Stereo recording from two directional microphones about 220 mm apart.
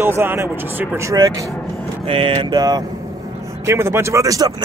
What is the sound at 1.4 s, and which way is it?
Speech, 5° left (ahead or behind).